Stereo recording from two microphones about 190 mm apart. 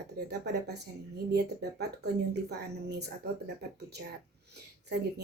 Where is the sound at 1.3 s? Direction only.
60° right (ahead or behind).